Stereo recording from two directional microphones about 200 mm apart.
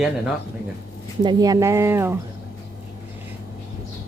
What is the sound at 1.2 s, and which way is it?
Speech, 20° right (ahead or behind).